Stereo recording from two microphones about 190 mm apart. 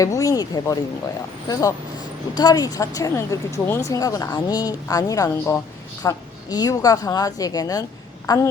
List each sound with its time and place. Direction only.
0.0 s a woman's voice: 15° left (ahead or behind)
2.3 s a woman's voice: 20° left (ahead or behind)